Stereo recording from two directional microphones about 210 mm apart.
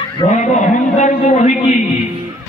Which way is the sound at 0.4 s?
35° left (ahead or behind).